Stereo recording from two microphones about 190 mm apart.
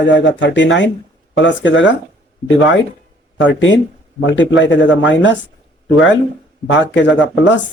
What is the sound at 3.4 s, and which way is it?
Speech, 75° left (ahead or behind).